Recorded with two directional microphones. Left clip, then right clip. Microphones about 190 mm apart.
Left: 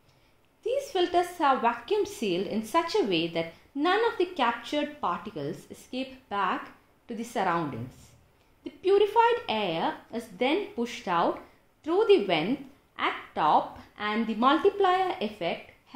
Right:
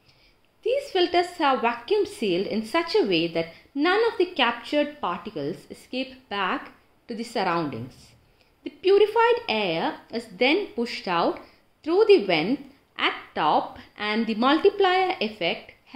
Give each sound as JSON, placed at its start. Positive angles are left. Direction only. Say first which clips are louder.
{"t": 0.6, "sound": "a woman's voice", "louder": "right 4 dB", "side_deg": -20}
{"t": 8.6, "sound": "a woman's voice", "louder": "right 4 dB", "side_deg": -20}